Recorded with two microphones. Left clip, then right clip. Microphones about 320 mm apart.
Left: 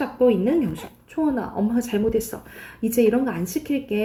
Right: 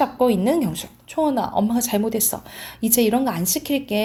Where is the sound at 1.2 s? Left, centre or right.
Centre.